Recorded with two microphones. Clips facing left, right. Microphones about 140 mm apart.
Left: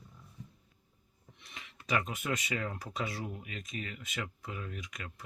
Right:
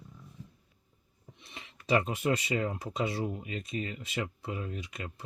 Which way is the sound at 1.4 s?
30° right (ahead or behind).